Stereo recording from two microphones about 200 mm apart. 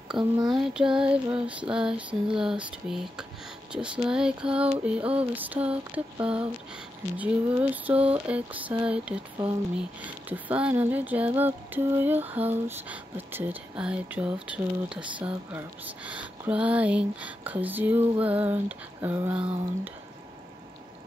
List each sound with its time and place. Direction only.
0.1 s child singing: 20° right (ahead or behind)
1.7 s speech: 5° right (ahead or behind)
4.8 s a sound: 5° right (ahead or behind)